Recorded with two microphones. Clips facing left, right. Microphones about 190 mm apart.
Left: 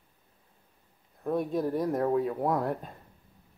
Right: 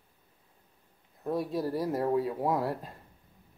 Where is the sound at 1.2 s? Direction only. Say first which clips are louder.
Left 2 dB; 5° right (ahead or behind).